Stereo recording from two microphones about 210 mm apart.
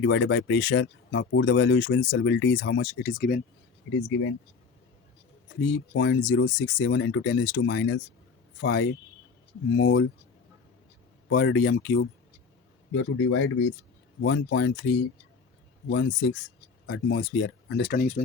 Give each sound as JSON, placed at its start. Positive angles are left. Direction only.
{"t": 0.0, "sound": "speech", "side_deg": 60}
{"t": 3.8, "sound": "a man's voice", "side_deg": 70}
{"t": 5.9, "sound": "speech", "side_deg": 60}
{"t": 11.3, "sound": "speech", "side_deg": 55}
{"t": 12.9, "sound": "a man's voice", "side_deg": 70}
{"t": 17.8, "sound": "speech", "side_deg": 45}